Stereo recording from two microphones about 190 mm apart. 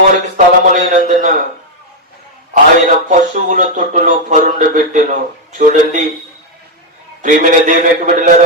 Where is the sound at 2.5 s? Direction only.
40° right (ahead or behind).